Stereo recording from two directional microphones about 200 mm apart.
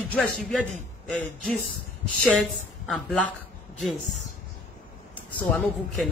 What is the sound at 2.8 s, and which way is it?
A woman's voice, centre (ahead or behind).